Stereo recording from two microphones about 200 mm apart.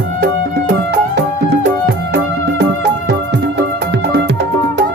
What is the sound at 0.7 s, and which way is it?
Music, 60° right (ahead or behind).